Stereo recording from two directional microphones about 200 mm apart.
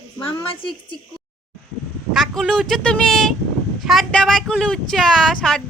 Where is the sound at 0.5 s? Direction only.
25° left (ahead or behind).